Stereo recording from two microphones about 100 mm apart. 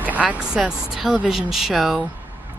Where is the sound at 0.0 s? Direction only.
15° right (ahead or behind).